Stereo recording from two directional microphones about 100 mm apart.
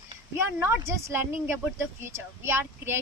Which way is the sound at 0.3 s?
25° right (ahead or behind).